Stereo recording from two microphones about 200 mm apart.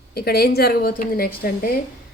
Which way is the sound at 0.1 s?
50° left (ahead or behind).